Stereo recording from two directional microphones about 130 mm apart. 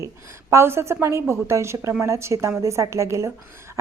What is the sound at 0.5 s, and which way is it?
A woman's voice, 20° right (ahead or behind).